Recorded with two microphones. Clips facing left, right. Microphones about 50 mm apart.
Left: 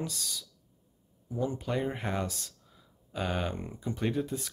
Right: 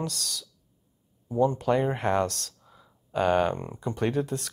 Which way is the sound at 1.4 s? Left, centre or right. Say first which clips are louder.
Right 8 dB; right.